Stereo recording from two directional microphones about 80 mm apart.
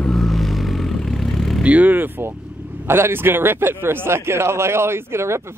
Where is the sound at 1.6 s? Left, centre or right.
Right.